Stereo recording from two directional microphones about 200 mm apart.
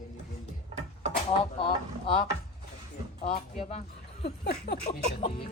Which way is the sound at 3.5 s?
30° left (ahead or behind).